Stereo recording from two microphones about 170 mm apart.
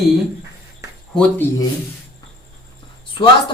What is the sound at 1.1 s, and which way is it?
Speech, 5° left (ahead or behind).